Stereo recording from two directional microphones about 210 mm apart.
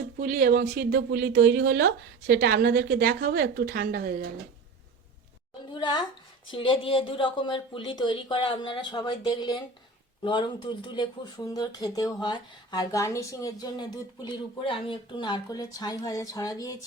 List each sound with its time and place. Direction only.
0.2 s speech: 45° right (ahead or behind)
5.7 s speech: 20° left (ahead or behind)